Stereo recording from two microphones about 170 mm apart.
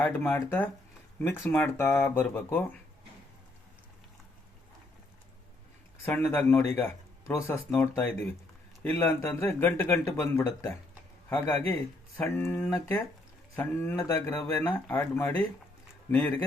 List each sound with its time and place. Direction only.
0.0 s speech: 10° left (ahead or behind)
6.1 s speech: 15° left (ahead or behind)
14.6 s speech: 10° left (ahead or behind)